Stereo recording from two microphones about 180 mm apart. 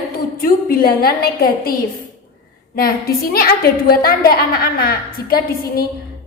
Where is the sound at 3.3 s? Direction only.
55° left (ahead or behind).